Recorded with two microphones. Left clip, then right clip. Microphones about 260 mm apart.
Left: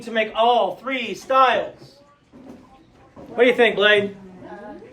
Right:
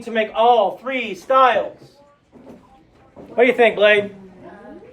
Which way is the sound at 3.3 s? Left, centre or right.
Right.